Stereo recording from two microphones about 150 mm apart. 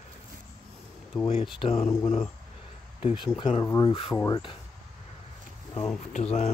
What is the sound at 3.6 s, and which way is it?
Speech, 25° left (ahead or behind).